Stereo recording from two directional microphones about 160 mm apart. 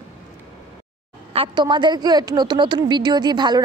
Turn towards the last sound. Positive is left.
turn(degrees=-25)  # may be behind; listen again after turning